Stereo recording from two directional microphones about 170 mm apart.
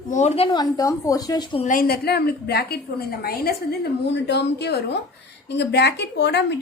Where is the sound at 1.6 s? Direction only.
55° left (ahead or behind).